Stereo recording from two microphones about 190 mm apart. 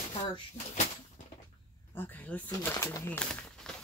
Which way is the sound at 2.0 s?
10° left (ahead or behind).